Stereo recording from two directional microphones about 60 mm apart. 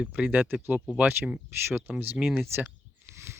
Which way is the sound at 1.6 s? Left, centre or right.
Right.